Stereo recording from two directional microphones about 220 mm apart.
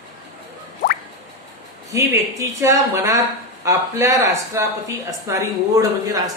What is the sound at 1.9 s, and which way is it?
Speech, 15° right (ahead or behind).